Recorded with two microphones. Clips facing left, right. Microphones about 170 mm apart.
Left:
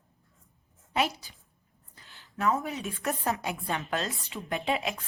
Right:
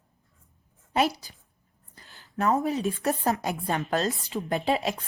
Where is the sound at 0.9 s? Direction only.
40° right (ahead or behind).